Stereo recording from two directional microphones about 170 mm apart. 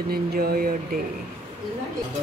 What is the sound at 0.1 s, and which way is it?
Speech, 65° right (ahead or behind).